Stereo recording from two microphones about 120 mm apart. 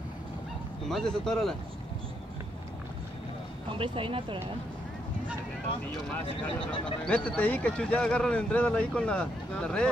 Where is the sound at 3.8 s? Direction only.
50° right (ahead or behind).